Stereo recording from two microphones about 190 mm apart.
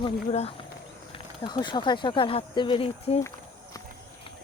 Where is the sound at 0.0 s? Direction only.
30° left (ahead or behind).